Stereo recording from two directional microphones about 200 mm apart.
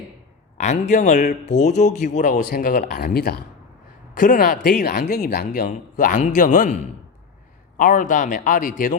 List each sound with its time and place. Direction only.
0.5 s a man's voice: 35° left (ahead or behind)